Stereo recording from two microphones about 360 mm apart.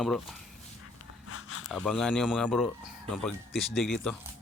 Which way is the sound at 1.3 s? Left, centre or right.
Left.